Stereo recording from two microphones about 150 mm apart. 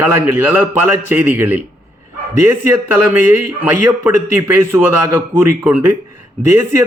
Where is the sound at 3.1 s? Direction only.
10° right (ahead or behind).